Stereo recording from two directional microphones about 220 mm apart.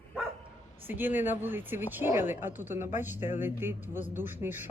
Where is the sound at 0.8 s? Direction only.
10° right (ahead or behind).